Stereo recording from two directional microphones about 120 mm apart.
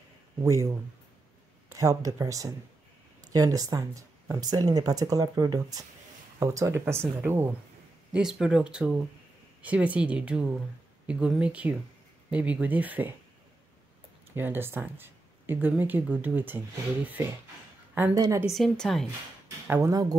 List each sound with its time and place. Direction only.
0.4 s speech: 25° right (ahead or behind)
8.1 s speech: 5° right (ahead or behind)
14.3 s speech: 15° right (ahead or behind)
18.1 s speech: 30° right (ahead or behind)
18.5 s speech: centre (ahead or behind)
19.7 s speech: 25° right (ahead or behind)